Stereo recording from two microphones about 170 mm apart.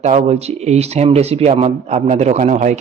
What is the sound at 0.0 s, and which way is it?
A man's voice, 40° right (ahead or behind).